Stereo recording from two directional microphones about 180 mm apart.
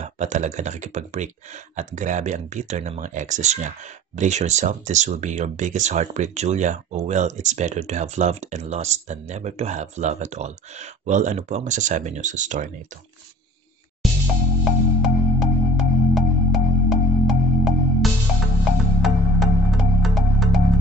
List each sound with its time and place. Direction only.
0.0 s speech: 40° right (ahead or behind)
14.0 s music: centre (ahead or behind)
18.9 s music: centre (ahead or behind)